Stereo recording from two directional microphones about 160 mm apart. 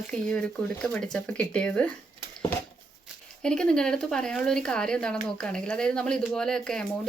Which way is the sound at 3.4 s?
5° left (ahead or behind).